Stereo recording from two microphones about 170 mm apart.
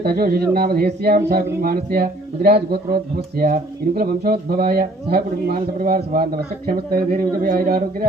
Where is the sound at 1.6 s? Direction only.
60° right (ahead or behind).